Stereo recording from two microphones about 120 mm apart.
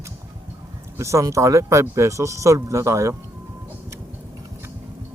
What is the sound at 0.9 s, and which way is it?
A man's voice, 25° right (ahead or behind).